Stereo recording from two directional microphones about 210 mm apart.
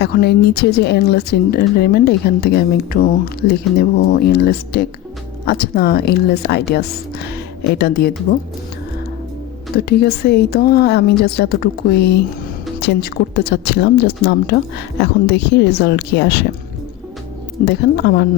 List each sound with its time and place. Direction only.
0.0 s speech: 50° left (ahead or behind)
9.7 s speech: 50° left (ahead or behind)
17.7 s speech: 50° left (ahead or behind)